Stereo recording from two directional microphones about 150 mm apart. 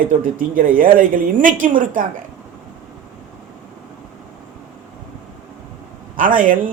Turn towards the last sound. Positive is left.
turn(degrees=-60)  # may be behind; listen again after turning